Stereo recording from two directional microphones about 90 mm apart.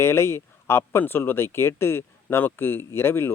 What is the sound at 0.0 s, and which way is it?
Speech, 30° left (ahead or behind).